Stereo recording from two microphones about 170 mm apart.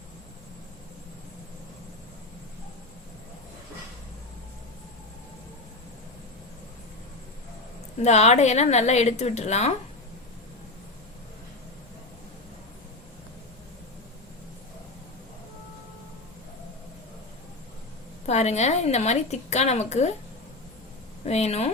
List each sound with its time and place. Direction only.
8.0 s a woman's voice: 40° left (ahead or behind)
18.3 s a woman's voice: 40° left (ahead or behind)
21.2 s a woman's voice: 40° left (ahead or behind)